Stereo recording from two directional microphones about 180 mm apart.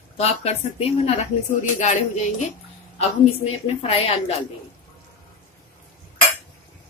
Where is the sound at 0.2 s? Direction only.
35° left (ahead or behind).